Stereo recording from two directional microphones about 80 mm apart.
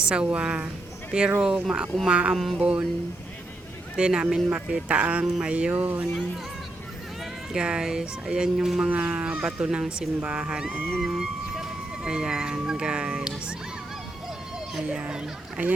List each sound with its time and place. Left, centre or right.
0.0 s speech: centre
2.3 s music: centre
2.6 s speech: centre
3.9 s speech: centre
7.5 s speech: centre
8.9 s speech: centre
14.8 s speech: centre